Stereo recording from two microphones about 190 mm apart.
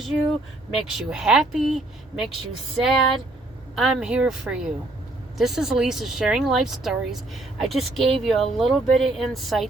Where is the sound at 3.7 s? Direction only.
Centre (ahead or behind).